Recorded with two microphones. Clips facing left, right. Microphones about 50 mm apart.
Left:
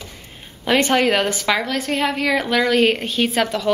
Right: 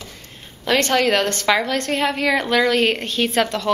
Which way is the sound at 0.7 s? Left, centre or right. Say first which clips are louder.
Left 1 dB; centre.